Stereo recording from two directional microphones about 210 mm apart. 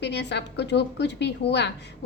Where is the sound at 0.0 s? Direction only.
55° left (ahead or behind).